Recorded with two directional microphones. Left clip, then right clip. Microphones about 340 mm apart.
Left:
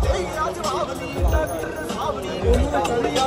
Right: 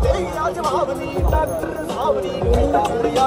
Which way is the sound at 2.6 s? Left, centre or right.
Right.